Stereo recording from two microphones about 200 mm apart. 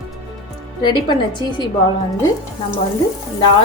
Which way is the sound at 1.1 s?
20° left (ahead or behind).